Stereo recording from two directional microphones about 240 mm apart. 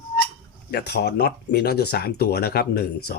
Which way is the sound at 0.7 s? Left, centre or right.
Left.